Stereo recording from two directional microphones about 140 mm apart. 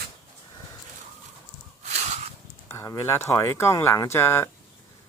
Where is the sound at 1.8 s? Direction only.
55° right (ahead or behind).